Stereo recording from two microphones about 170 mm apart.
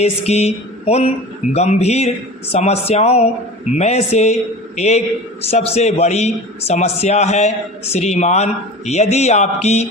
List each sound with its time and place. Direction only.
0.0 s speech: 40° left (ahead or behind)